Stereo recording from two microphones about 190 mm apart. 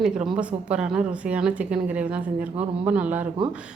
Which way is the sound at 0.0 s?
5° right (ahead or behind).